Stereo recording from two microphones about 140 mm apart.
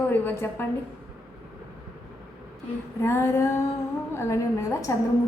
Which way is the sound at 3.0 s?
20° left (ahead or behind).